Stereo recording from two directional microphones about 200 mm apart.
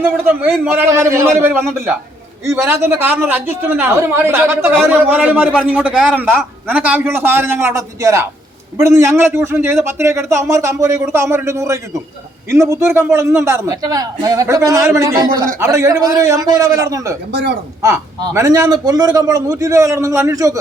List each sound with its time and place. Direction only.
0.0 s a man's voice: 10° right (ahead or behind)